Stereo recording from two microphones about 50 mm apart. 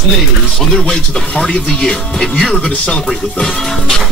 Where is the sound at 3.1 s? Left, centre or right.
Centre.